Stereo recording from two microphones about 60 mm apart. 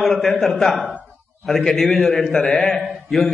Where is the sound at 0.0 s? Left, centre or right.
Centre.